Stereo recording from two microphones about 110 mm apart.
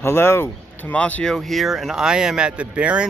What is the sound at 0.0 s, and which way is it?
Speech, 25° left (ahead or behind).